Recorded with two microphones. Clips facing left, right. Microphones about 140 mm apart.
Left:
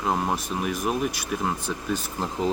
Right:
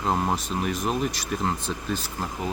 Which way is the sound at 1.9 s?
20° left (ahead or behind).